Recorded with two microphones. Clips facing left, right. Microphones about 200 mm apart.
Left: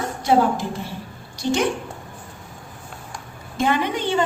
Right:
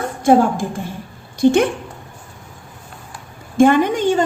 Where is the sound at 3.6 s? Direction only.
50° right (ahead or behind).